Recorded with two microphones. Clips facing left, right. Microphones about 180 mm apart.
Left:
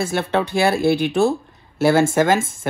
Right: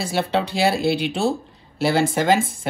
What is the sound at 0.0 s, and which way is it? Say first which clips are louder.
Speech: left 2 dB; 50° left (ahead or behind).